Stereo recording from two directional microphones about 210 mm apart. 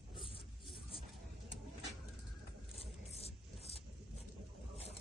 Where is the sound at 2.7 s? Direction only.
30° left (ahead or behind).